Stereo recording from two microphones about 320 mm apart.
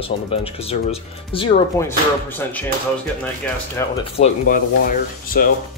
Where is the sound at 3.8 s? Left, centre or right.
Centre.